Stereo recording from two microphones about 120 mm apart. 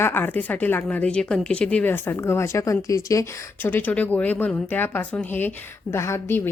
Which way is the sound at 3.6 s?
15° left (ahead or behind).